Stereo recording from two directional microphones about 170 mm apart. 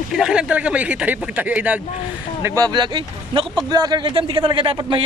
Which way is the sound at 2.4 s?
20° right (ahead or behind).